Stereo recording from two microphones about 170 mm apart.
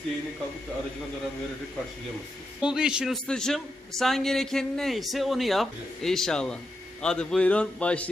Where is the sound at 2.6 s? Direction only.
5° right (ahead or behind).